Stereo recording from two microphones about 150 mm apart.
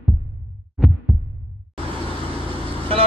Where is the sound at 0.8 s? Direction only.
Centre (ahead or behind).